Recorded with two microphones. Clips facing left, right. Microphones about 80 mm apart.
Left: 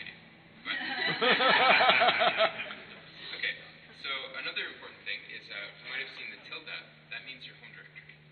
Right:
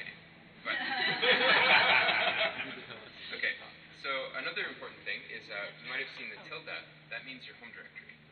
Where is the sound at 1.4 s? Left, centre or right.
Left.